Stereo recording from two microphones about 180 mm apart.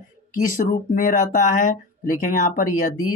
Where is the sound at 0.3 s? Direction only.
50° left (ahead or behind).